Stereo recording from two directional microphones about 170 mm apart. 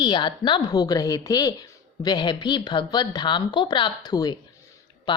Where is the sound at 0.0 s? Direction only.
25° left (ahead or behind).